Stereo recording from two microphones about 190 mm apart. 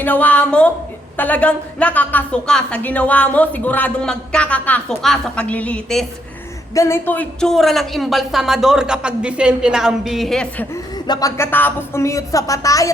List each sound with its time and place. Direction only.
0.0 s a woman's voice: 10° left (ahead or behind)
6.7 s a woman's voice: 15° left (ahead or behind)
10.9 s a woman's voice: 20° left (ahead or behind)